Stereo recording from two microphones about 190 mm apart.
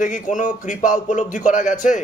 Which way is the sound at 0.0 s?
40° left (ahead or behind).